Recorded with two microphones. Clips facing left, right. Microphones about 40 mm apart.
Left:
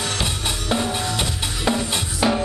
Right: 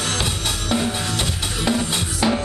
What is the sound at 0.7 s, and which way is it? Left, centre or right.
Drum kit, centre.